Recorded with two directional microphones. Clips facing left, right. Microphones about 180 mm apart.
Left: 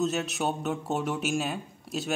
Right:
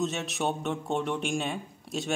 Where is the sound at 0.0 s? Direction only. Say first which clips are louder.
Left 2 dB; centre (ahead or behind).